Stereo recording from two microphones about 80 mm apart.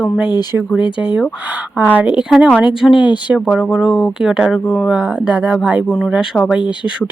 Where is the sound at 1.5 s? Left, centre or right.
Right.